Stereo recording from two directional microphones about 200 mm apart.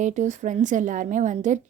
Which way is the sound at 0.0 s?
35° right (ahead or behind).